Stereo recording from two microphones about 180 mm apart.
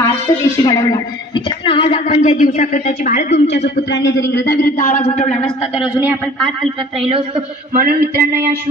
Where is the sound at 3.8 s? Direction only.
70° left (ahead or behind); by 4.9 s 55° left (ahead or behind).